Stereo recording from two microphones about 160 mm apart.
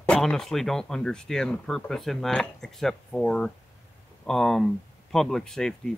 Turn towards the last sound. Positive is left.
turn(degrees=5)  # may be behind; listen again after turning